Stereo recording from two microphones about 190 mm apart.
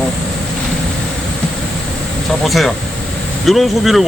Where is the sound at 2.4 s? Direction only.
Centre (ahead or behind).